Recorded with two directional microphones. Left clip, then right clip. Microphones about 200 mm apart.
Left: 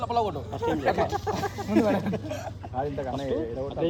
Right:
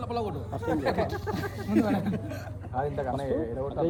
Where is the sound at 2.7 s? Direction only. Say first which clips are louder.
Right 1 dB; 15° right (ahead or behind).